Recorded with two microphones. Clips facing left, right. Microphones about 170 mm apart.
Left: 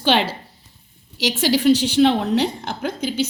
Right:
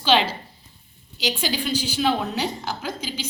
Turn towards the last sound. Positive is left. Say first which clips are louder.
# left 7 dB
turn(degrees=55)  # may be behind; listen again after turning